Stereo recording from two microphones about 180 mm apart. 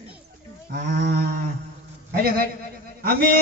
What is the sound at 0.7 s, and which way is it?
Livestock, 60° right (ahead or behind).